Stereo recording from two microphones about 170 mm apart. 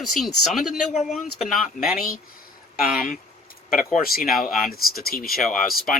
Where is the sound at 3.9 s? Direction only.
55° left (ahead or behind).